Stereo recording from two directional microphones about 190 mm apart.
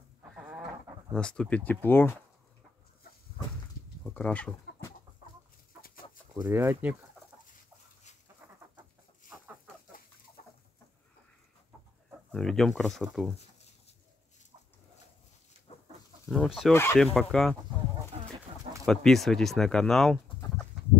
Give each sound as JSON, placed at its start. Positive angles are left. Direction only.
{"t": 0.3, "sound": "a sound", "side_deg": -5}
{"t": 1.1, "sound": "speech", "side_deg": 5}
{"t": 4.0, "sound": "chicken", "side_deg": 10}
{"t": 6.3, "sound": "speech", "side_deg": -15}
{"t": 12.3, "sound": "speech", "side_deg": 0}
{"t": 15.7, "sound": "chicken", "side_deg": 30}
{"t": 16.3, "sound": "speech", "side_deg": 0}
{"t": 16.7, "sound": "speech", "side_deg": 10}
{"t": 17.0, "sound": "speech", "side_deg": 0}
{"t": 18.1, "sound": "a sound", "side_deg": -35}
{"t": 18.9, "sound": "speech", "side_deg": 0}